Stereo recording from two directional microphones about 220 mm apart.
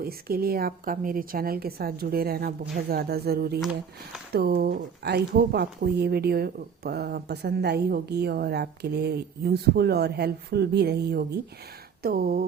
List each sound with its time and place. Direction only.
0.0 s speech: 45° right (ahead or behind)
3.6 s speech: centre (ahead or behind)
4.3 s speech: 45° right (ahead or behind)